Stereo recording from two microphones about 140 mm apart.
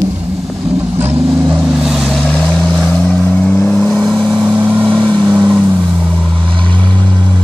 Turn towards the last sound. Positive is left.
turn(degrees=-10)  # may be behind; listen again after turning